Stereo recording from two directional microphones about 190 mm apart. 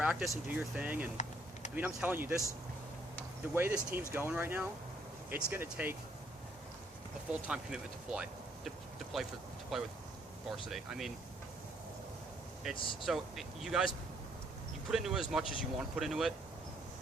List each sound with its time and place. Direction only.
0.0 s speech: 5° right (ahead or behind)
1.1 s a sound: 40° left (ahead or behind)
1.7 s speech: 10° right (ahead or behind)
3.5 s speech: 10° right (ahead or behind)
7.3 s speech: 5° right (ahead or behind)
10.7 s speech: centre (ahead or behind)
12.7 s speech: 25° left (ahead or behind)
13.1 s speech: centre (ahead or behind)